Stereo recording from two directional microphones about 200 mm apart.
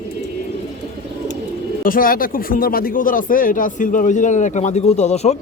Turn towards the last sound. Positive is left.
turn(degrees=35)  # may be behind; listen again after turning